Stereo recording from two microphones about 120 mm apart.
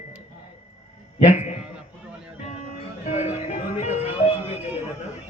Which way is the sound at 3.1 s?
70° left (ahead or behind).